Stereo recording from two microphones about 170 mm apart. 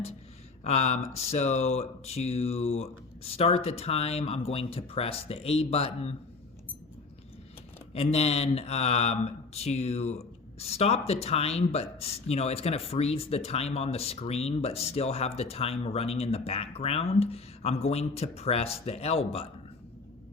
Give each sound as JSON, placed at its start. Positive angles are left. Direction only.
{"t": 0.6, "sound": "speech", "side_deg": 40}
{"t": 7.9, "sound": "speech", "side_deg": 35}